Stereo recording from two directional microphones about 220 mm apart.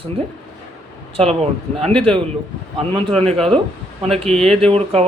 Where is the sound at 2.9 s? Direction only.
25° right (ahead or behind).